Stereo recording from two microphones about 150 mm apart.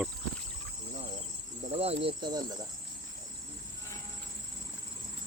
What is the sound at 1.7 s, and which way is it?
Speech, 40° right (ahead or behind).